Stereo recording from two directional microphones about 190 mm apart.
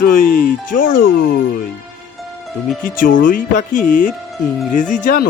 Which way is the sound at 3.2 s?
45° left (ahead or behind).